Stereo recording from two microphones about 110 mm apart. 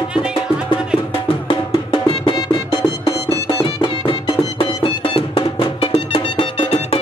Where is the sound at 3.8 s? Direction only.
55° left (ahead or behind).